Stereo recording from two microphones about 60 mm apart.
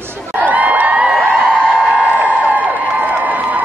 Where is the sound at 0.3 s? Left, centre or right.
Right.